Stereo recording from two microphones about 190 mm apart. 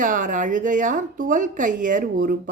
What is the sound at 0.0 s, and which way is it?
A woman's voice, 45° right (ahead or behind).